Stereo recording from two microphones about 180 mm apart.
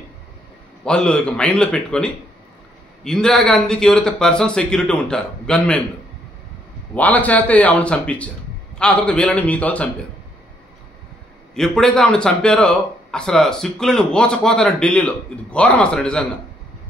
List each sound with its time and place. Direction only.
0.8 s speech: 5° left (ahead or behind)
6.9 s speech: 10° left (ahead or behind)
11.5 s speech: 5° left (ahead or behind)